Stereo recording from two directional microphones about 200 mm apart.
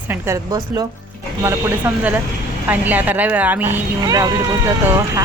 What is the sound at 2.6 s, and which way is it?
Speech, 10° right (ahead or behind).